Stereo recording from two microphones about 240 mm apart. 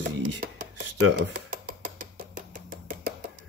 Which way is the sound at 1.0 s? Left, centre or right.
Right.